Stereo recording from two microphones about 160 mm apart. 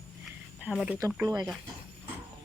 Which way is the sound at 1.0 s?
15° right (ahead or behind).